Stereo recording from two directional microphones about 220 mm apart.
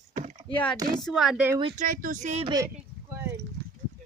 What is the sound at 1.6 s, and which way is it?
Speech, 25° right (ahead or behind).